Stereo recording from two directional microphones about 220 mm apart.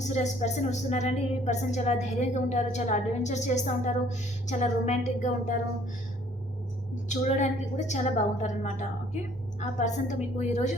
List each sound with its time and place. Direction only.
0.1 s a woman's voice: 30° left (ahead or behind)
7.1 s a woman's voice: 30° left (ahead or behind)